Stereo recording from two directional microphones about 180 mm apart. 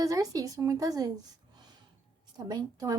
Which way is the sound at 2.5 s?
20° right (ahead or behind).